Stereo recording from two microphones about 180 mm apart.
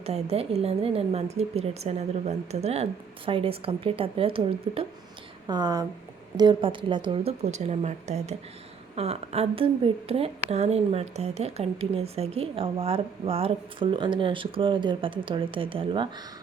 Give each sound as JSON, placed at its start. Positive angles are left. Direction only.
{"t": 0.0, "sound": "a woman's voice", "side_deg": -35}